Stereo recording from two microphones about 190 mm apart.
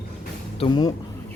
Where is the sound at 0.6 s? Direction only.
25° left (ahead or behind).